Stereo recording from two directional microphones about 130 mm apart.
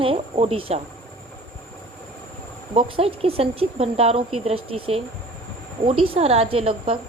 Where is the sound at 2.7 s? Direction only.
45° right (ahead or behind).